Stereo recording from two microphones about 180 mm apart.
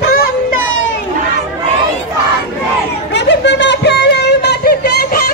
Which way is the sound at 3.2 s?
75° left (ahead or behind).